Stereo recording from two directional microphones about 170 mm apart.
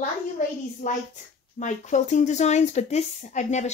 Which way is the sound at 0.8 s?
45° left (ahead or behind).